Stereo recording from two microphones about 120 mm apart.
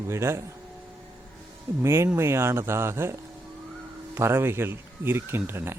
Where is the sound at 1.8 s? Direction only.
20° right (ahead or behind).